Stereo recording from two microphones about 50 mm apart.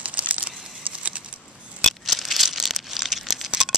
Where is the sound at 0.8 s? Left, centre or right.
Right.